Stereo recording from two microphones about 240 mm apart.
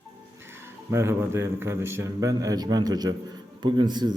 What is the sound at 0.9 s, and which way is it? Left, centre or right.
Speech, centre.